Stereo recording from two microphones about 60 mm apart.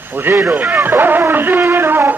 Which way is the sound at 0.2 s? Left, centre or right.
Right.